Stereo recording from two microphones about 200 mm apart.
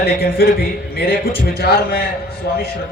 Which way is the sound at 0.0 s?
50° left (ahead or behind).